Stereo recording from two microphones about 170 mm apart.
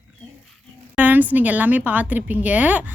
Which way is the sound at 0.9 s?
10° right (ahead or behind).